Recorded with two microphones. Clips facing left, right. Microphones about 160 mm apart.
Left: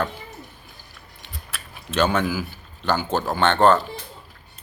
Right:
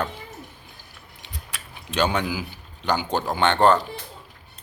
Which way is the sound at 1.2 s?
15° right (ahead or behind).